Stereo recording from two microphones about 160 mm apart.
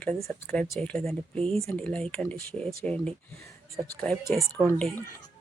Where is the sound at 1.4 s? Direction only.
40° right (ahead or behind).